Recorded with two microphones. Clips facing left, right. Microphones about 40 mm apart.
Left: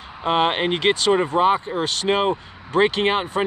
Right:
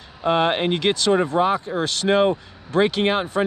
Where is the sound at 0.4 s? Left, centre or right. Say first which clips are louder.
Left 2 dB; left.